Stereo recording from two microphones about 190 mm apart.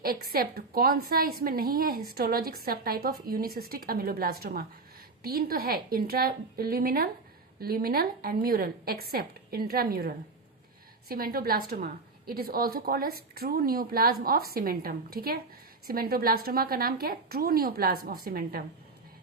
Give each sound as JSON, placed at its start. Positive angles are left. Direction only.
{"t": 0.0, "sound": "a woman's voice", "side_deg": -50}